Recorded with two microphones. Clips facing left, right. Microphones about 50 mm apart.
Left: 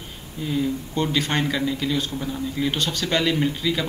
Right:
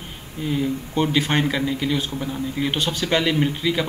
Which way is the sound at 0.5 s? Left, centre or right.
Centre.